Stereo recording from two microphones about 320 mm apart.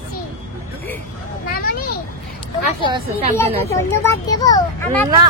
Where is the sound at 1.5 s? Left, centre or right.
Left.